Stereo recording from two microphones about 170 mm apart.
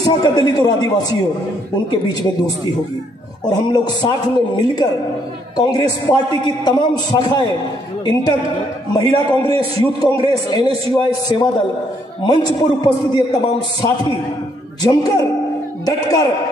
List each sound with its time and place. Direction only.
0.0 s a man's voice: 25° left (ahead or behind)
3.4 s a man's voice: 25° left (ahead or behind)
14.8 s a man's voice: 25° left (ahead or behind)